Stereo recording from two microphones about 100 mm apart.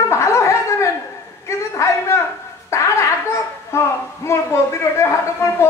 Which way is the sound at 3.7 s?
25° left (ahead or behind).